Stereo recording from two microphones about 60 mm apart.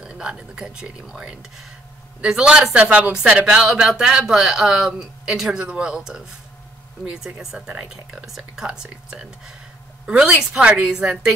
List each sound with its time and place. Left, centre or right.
0.0 s speech: centre
3.6 s a woman's voice: centre